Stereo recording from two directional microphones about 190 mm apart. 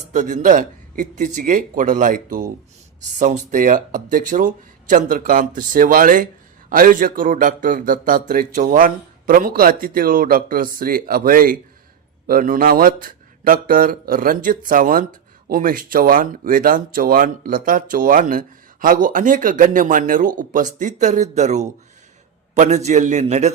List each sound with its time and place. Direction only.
0.1 s a man's voice: 40° right (ahead or behind)